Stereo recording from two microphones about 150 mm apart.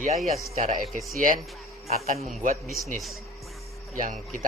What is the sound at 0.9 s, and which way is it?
Speech, 60° right (ahead or behind).